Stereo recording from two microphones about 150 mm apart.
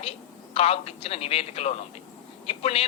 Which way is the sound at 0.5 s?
40° left (ahead or behind).